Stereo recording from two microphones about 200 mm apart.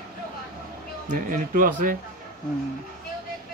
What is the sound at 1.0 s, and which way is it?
Speech, 45° right (ahead or behind).